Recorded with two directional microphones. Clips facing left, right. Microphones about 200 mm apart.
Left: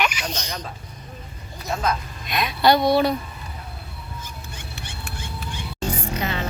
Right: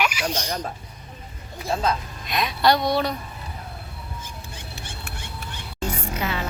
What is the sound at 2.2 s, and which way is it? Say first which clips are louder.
Speech: left 2 dB; centre (ahead or behind).